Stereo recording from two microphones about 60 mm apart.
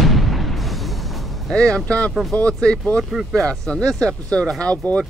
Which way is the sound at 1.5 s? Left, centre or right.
Centre.